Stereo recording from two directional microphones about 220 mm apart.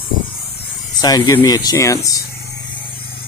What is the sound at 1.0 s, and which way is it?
Speech, 15° left (ahead or behind).